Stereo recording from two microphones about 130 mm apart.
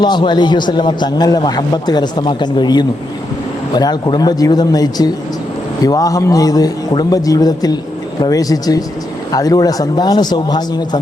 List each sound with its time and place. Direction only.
0.0 s a man's voice: 35° left (ahead or behind)